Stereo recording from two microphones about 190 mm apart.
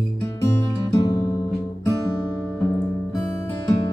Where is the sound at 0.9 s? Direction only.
20° left (ahead or behind).